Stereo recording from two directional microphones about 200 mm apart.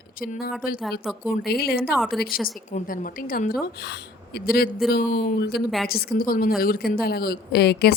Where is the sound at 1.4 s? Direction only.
50° left (ahead or behind).